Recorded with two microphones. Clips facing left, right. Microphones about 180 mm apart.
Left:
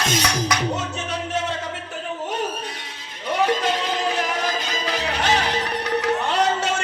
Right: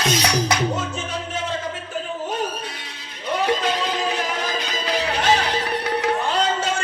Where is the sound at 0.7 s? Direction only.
70° left (ahead or behind).